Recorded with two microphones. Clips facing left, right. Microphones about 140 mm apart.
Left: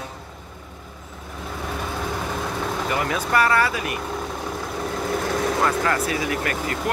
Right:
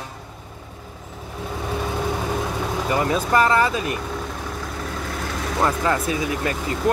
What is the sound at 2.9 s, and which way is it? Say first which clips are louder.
Speech: right 4 dB; 25° right (ahead or behind).